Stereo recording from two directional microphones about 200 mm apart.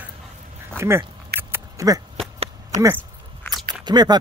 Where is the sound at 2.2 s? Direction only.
30° right (ahead or behind).